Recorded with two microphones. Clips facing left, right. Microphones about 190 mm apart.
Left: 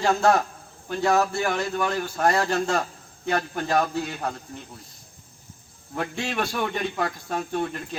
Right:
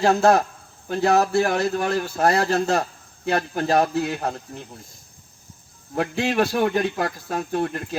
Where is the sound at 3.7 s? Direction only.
60° right (ahead or behind).